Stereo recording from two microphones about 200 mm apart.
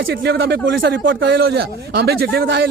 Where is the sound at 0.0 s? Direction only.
55° right (ahead or behind).